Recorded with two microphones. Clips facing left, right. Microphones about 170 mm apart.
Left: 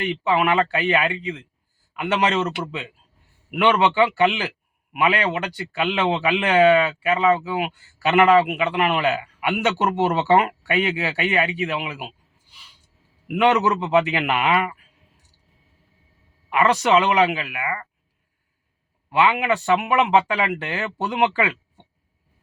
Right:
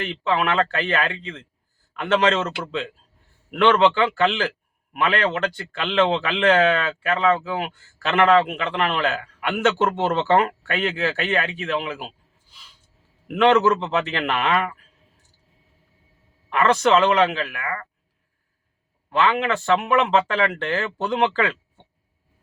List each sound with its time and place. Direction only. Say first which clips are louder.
0.1 s a man's voice: left 3 dB; 15° left (ahead or behind)
16.5 s a man's voice: even; 10° left (ahead or behind)
19.1 s a man's voice: left 1 dB; 10° left (ahead or behind)